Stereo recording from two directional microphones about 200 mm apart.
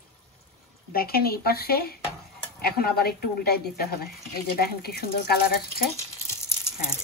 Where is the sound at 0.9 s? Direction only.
50° left (ahead or behind).